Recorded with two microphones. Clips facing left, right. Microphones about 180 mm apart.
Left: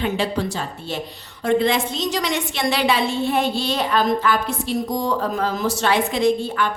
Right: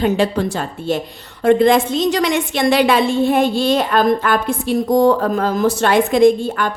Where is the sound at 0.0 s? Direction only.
50° right (ahead or behind).